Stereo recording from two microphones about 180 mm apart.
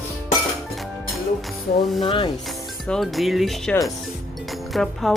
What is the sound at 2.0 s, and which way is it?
Speech, 30° left (ahead or behind).